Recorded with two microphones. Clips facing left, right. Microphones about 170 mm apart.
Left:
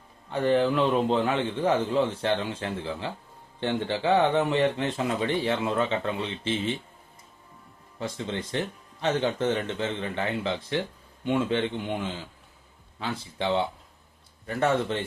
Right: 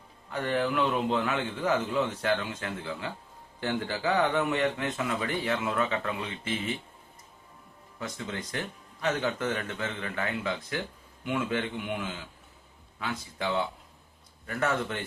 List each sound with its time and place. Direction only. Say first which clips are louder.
0.3 s speech: left 6 dB; 30° left (ahead or behind)
7.9 s speech: left 4 dB; 30° left (ahead or behind)